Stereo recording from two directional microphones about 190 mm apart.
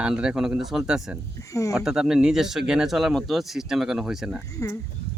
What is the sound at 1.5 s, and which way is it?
Speech, 15° left (ahead or behind).